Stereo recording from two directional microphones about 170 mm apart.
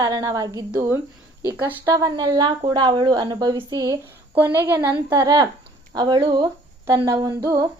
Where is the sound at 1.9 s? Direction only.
25° right (ahead or behind).